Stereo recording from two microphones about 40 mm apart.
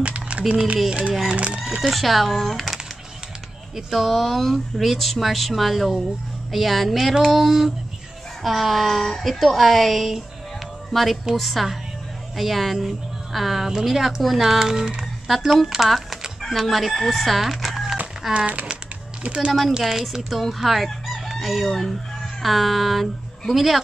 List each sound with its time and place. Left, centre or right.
0.0 s a sound: right
0.8 s speech: right
1.8 s speech: centre
3.9 s speech: centre
13.7 s speech: centre
16.3 s chicken: centre
18.3 s speech: right
19.8 s speech: centre
20.3 s chicken: centre